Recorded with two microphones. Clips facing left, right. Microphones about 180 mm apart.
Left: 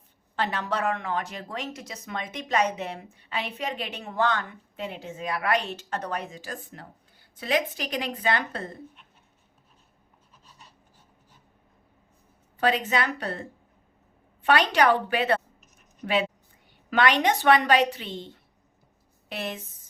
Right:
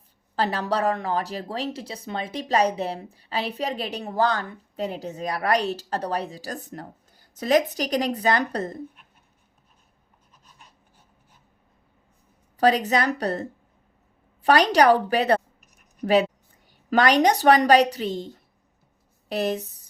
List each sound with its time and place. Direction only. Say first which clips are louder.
0.3 s speech: right 4 dB; 35° right (ahead or behind)
12.5 s speech: right 5 dB; 40° right (ahead or behind)